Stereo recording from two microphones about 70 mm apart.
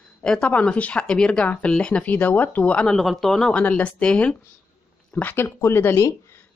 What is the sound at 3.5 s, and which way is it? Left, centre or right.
Speech, centre.